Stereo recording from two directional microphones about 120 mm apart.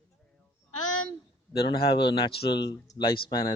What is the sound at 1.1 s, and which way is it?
Speech, 45° left (ahead or behind).